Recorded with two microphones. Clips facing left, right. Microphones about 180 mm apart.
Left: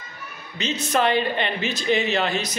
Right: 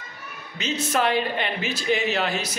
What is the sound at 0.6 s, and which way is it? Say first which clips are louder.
Speech: left 1 dB; 5° right (ahead or behind).